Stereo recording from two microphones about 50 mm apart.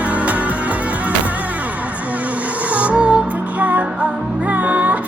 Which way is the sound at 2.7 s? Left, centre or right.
Right.